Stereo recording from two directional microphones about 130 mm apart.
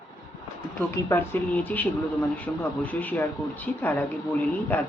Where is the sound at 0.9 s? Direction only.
20° left (ahead or behind).